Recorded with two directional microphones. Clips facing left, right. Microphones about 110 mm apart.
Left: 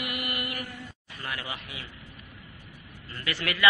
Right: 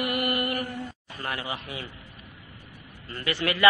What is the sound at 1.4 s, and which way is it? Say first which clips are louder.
Speech: right 5 dB; 30° right (ahead or behind).